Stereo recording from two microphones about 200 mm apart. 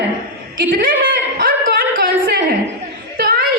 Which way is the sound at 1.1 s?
45° right (ahead or behind).